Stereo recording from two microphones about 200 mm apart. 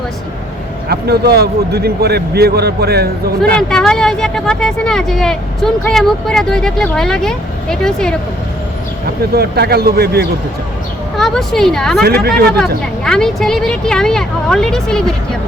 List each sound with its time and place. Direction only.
0.9 s a man's voice: 55° right (ahead or behind)
3.5 s speech: 5° left (ahead or behind)
9.3 s a man's voice: 50° right (ahead or behind)
11.2 s speech: centre (ahead or behind)
12.0 s a man's voice: 50° right (ahead or behind)
13.1 s speech: 5° left (ahead or behind)